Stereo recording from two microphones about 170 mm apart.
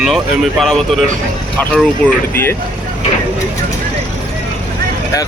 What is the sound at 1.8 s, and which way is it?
Speech, 10° left (ahead or behind).